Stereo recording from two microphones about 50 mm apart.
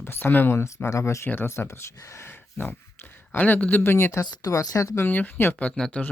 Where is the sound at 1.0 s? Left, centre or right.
Left.